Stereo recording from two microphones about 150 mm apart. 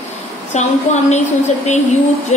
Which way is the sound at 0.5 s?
50° left (ahead or behind).